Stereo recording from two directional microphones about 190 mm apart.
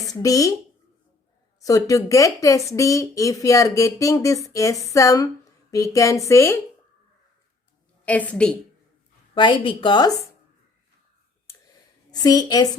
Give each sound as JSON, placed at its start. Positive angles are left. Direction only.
{"t": 0.1, "sound": "speech", "side_deg": 15}
{"t": 1.6, "sound": "speech", "side_deg": 15}
{"t": 8.0, "sound": "speech", "side_deg": 10}
{"t": 9.3, "sound": "a woman's voice", "side_deg": 25}
{"t": 11.5, "sound": "a sound", "side_deg": 15}
{"t": 12.2, "sound": "a woman's voice", "side_deg": 20}